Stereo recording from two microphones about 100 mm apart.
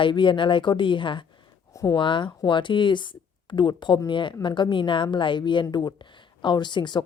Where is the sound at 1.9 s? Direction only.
55° left (ahead or behind).